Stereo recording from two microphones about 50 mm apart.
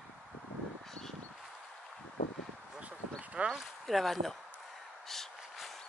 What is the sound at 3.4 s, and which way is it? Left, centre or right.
Speech, right.